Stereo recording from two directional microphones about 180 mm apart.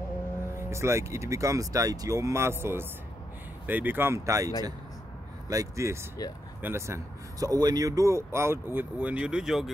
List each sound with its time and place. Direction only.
0.6 s speech: 15° right (ahead or behind)